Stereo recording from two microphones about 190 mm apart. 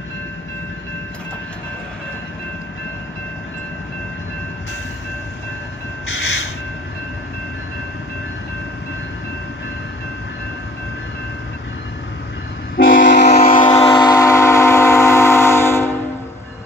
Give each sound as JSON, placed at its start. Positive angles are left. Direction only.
{"t": 12.7, "sound": "train", "side_deg": 80}
{"t": 13.3, "sound": "siren", "side_deg": 40}